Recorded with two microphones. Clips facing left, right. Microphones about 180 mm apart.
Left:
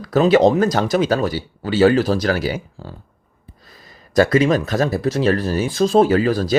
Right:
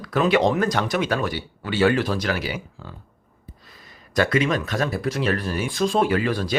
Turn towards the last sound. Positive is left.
turn(degrees=40)  # may be behind; listen again after turning